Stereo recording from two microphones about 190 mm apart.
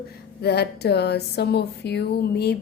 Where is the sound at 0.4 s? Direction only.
60° left (ahead or behind).